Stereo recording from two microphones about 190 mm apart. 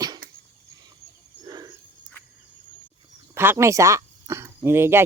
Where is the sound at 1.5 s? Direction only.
20° right (ahead or behind).